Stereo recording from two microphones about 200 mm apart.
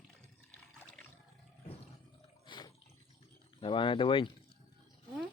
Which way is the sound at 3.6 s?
25° left (ahead or behind).